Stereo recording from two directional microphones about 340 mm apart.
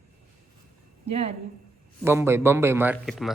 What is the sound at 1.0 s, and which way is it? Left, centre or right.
Speech, centre.